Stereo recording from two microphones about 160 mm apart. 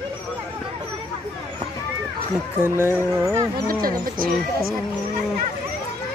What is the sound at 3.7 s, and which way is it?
Speech, 65° right (ahead or behind).